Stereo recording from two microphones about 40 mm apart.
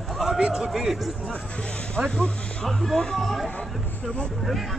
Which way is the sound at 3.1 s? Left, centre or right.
Centre.